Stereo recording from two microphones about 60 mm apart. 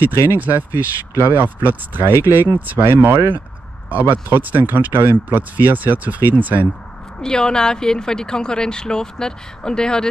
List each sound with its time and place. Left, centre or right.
0.1 s speech: left
0.4 s speech: right
2.8 s speech: right
7.2 s a woman's voice: centre